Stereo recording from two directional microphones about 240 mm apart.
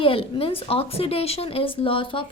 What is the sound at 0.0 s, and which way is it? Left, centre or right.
A woman's voice, left.